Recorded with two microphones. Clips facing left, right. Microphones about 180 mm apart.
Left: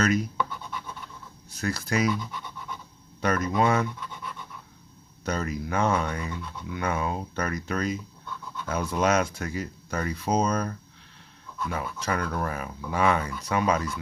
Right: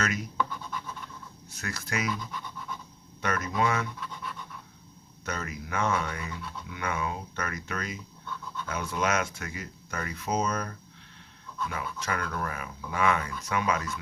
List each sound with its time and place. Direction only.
0.3 s scratch: centre (ahead or behind)
1.5 s speech: 35° left (ahead or behind)
3.2 s speech: 35° left (ahead or behind)
5.2 s speech: 35° left (ahead or behind)
11.7 s speech: 35° left (ahead or behind)